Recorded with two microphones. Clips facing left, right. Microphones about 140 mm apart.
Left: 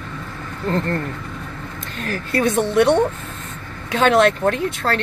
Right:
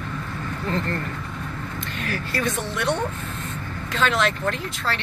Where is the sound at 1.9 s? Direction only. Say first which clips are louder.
Left 4 dB; 40° left (ahead or behind).